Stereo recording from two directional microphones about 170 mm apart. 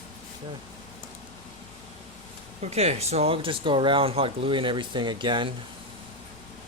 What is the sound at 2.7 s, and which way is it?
Speech, 40° right (ahead or behind).